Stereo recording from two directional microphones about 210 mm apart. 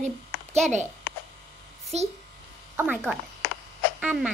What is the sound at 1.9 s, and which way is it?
Speech, 30° right (ahead or behind).